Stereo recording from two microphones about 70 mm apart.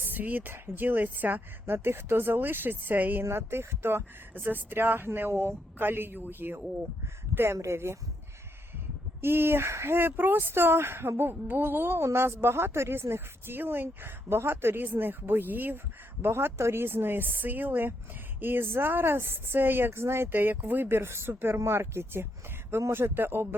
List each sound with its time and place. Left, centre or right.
0.0 s a woman's voice: right
7.3 s a woman's voice: right
9.2 s a woman's voice: right